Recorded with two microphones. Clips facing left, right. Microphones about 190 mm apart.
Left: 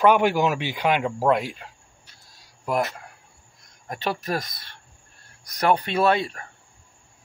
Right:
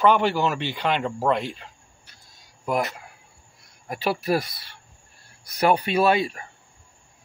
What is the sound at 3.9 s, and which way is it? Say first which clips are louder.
Speech: right 4 dB; 10° right (ahead or behind).